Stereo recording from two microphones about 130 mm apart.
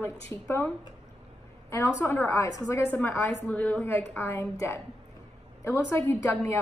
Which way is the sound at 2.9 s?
15° left (ahead or behind).